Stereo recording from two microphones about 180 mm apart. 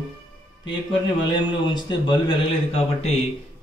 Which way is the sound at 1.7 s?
25° left (ahead or behind).